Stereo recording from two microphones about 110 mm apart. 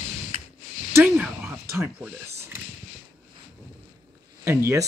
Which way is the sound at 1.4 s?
20° right (ahead or behind).